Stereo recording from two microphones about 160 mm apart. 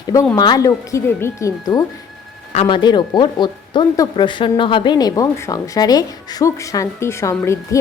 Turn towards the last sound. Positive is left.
turn(degrees=20)  # may be behind; listen again after turning